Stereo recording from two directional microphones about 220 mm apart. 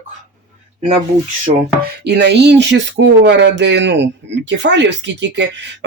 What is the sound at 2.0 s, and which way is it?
Speech, 50° right (ahead or behind).